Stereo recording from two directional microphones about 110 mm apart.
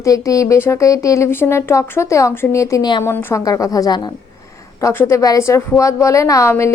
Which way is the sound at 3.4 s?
35° left (ahead or behind).